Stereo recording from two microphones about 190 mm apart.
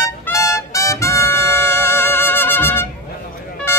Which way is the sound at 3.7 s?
10° left (ahead or behind).